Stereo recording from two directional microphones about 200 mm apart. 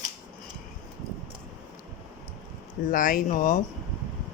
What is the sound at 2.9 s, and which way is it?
Speech, 45° left (ahead or behind).